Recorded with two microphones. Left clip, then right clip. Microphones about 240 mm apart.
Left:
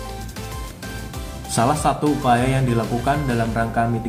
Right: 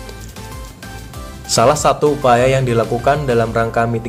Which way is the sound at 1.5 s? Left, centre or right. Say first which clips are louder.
Right 7 dB; right.